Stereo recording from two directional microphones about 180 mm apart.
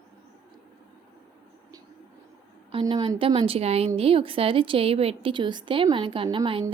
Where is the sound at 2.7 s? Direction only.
30° right (ahead or behind).